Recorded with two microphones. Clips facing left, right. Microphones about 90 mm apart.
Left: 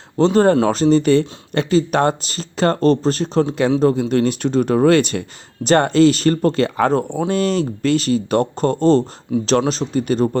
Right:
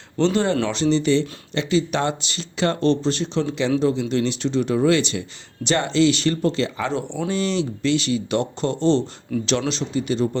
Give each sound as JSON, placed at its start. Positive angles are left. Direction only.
{"t": 0.2, "sound": "speech", "side_deg": 40}